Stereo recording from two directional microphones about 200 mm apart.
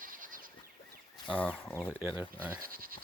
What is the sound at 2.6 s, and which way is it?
Speech, 45° right (ahead or behind).